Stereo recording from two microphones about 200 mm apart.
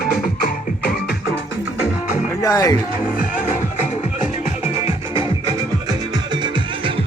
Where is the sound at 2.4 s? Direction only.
15° left (ahead or behind).